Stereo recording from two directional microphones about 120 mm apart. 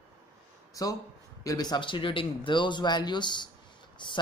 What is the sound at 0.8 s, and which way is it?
A man's voice, 30° left (ahead or behind).